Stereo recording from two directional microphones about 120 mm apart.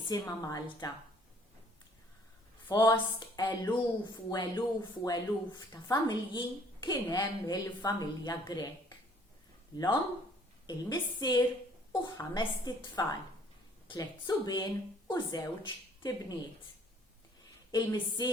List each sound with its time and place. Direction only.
0.1 s speech: 30° left (ahead or behind)
2.6 s speech: 40° left (ahead or behind)
17.7 s speech: 35° left (ahead or behind)